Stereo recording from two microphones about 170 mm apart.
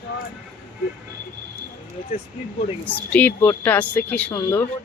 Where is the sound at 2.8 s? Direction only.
10° left (ahead or behind).